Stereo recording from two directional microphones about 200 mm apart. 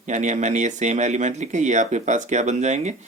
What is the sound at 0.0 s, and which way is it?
Speech, 35° right (ahead or behind).